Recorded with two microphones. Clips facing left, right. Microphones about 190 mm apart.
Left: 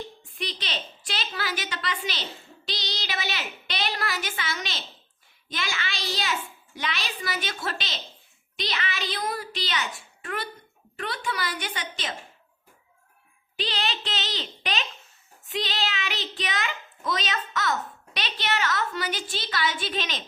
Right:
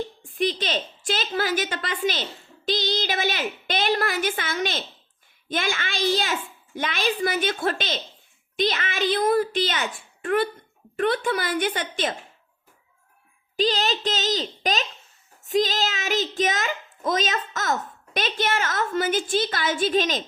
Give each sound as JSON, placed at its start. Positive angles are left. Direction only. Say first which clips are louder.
{"t": 0.2, "sound": "a woman's voice", "louder": "right 11 dB", "side_deg": -50}
{"t": 13.6, "sound": "a child's voice", "louder": "right 8 dB", "side_deg": -45}